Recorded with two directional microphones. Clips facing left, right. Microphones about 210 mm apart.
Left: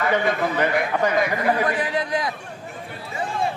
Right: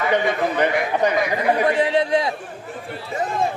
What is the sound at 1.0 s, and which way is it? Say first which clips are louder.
A man's voice: right 2 dB; 20° right (ahead or behind).